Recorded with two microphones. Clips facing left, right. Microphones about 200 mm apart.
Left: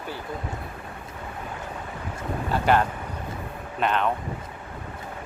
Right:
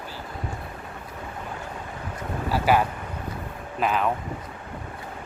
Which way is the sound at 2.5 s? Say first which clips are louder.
Even; 5° right (ahead or behind).